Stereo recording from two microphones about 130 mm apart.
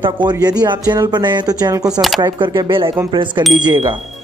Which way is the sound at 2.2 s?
35° right (ahead or behind).